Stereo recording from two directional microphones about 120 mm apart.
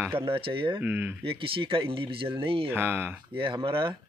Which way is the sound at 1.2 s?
50° right (ahead or behind).